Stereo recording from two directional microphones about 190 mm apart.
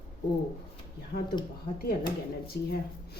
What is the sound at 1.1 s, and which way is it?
Speech, 50° left (ahead or behind).